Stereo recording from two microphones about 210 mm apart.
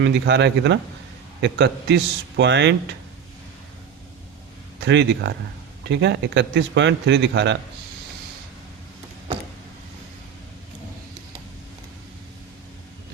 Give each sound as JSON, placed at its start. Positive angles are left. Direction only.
{"t": 0.0, "sound": "a man's voice", "side_deg": -55}
{"t": 4.8, "sound": "a man's voice", "side_deg": -55}